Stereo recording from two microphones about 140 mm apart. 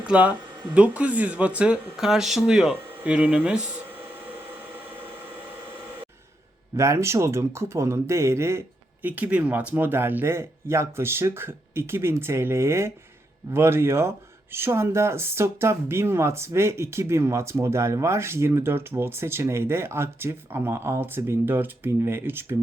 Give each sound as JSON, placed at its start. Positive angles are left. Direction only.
{"t": 0.0, "sound": "speech", "side_deg": -10}
{"t": 6.7, "sound": "speech", "side_deg": -20}